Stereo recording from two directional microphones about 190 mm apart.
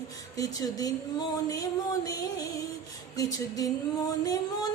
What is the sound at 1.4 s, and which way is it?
Music, 15° left (ahead or behind).